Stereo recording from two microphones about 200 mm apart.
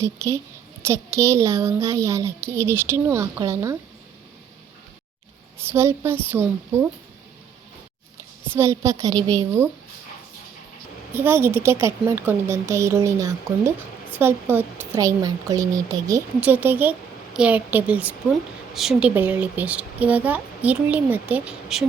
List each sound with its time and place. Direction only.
0.0 s a woman's voice: 15° right (ahead or behind)
5.6 s a woman's voice: 15° right (ahead or behind)
8.5 s a woman's voice: 15° right (ahead or behind)
11.1 s a woman's voice: 10° right (ahead or behind)